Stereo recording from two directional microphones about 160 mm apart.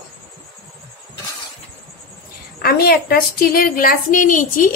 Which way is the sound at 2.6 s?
70° left (ahead or behind).